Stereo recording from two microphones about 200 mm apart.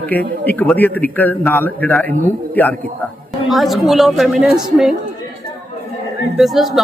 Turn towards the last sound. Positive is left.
turn(degrees=0)  # may be behind; listen again after turning